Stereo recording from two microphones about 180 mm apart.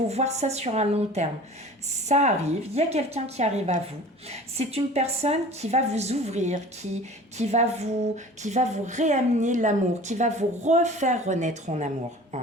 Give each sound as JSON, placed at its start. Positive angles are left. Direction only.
{"t": 0.1, "sound": "speech", "side_deg": -40}